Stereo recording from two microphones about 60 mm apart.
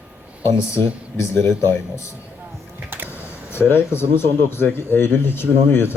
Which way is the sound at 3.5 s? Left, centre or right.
Left.